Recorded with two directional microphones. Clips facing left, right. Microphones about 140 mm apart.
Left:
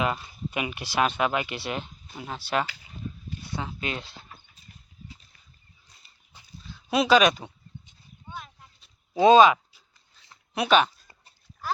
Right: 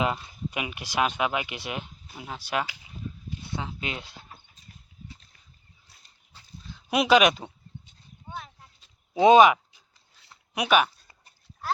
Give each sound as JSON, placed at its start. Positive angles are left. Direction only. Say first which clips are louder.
{"t": 0.0, "sound": "speech", "louder": "even", "side_deg": -15}
{"t": 6.3, "sound": "dog", "louder": "even", "side_deg": 15}
{"t": 6.7, "sound": "speech", "louder": "even", "side_deg": -20}
{"t": 9.2, "sound": "speech", "louder": "even", "side_deg": -20}